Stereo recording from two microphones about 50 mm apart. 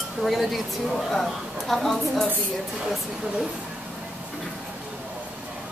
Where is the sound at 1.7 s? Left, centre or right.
Centre.